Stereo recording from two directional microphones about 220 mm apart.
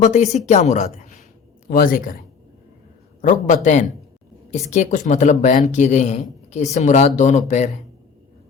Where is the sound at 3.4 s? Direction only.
35° left (ahead or behind).